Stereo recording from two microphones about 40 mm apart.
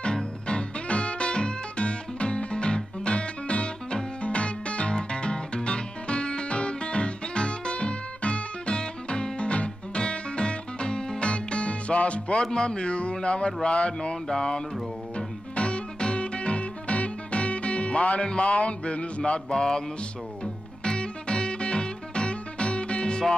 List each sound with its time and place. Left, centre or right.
0.0 s music: left
12.4 s a man's voice: left
14.2 s music: centre
18.2 s a man's voice: left
19.5 s music: centre
20.8 s music: left